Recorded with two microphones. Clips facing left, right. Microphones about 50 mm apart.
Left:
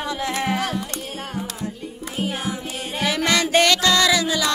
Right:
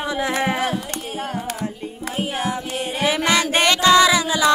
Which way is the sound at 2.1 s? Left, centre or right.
Right.